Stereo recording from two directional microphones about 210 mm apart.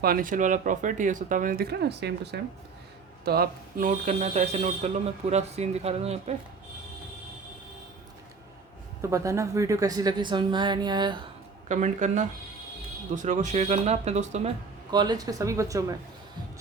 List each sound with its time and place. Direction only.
0.0 s speech: 45° right (ahead or behind)
9.0 s speech: 15° right (ahead or behind)
11.7 s speech: 35° right (ahead or behind)
14.8 s speech: 20° right (ahead or behind)